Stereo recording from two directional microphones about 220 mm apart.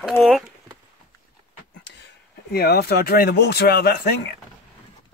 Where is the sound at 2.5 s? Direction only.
45° left (ahead or behind).